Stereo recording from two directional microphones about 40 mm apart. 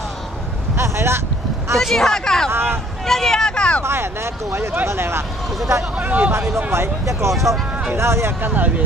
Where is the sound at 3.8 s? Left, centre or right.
Right.